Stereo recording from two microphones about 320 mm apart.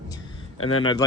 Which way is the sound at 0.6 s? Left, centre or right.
Left.